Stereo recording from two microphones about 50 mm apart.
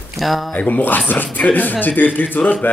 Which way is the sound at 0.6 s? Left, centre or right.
Left.